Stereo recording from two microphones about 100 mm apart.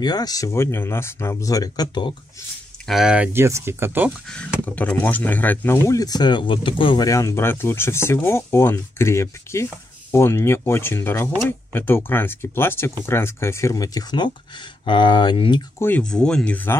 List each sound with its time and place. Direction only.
0.0 s speech: 40° left (ahead or behind); by 1.5 s 25° left (ahead or behind)
1.5 s speech: 40° left (ahead or behind)
2.9 s speech: 5° right (ahead or behind)
3.3 s speech: 25° right (ahead or behind)
4.3 s speech: 10° left (ahead or behind)
5.9 s speech: 40° left (ahead or behind)
7.1 s speech: 30° left (ahead or behind); by 15.6 s 55° left (ahead or behind)
16.0 s speech: 10° left (ahead or behind)